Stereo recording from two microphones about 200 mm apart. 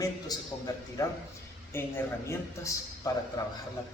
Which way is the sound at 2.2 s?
15° left (ahead or behind).